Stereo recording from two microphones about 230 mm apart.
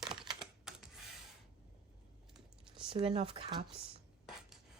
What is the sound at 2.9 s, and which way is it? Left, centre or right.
Speech, right.